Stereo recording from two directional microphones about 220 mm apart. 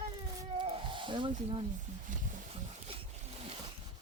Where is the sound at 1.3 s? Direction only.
30° right (ahead or behind).